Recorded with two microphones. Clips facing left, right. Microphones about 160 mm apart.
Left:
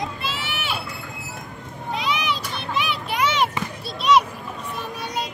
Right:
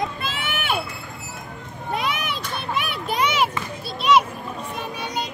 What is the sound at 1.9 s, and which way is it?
Children playing, 50° right (ahead or behind).